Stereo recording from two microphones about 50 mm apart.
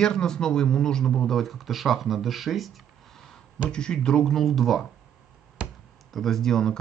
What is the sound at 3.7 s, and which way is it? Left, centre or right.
Speech, centre.